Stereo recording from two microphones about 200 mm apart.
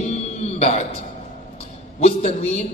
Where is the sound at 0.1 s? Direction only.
30° left (ahead or behind).